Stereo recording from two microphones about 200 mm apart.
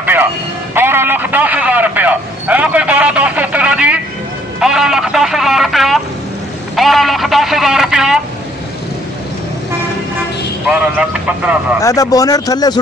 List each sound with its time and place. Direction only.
0.0 s music: 10° right (ahead or behind)
0.7 s a sound: 10° right (ahead or behind)
10.7 s a man's voice: 5° right (ahead or behind)
11.8 s speech: 15° left (ahead or behind)